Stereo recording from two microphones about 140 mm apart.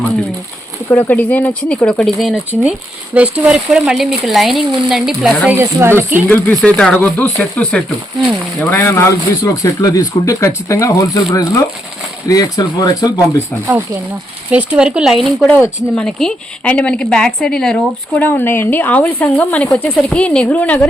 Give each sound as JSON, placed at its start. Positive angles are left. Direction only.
{"t": 0.9, "sound": "a woman's voice", "side_deg": 15}
{"t": 5.5, "sound": "speech", "side_deg": -20}
{"t": 6.2, "sound": "a woman's voice", "side_deg": 10}
{"t": 8.7, "sound": "a man's voice", "side_deg": 15}
{"t": 14.5, "sound": "speech", "side_deg": -10}
{"t": 15.4, "sound": "a woman's voice", "side_deg": 10}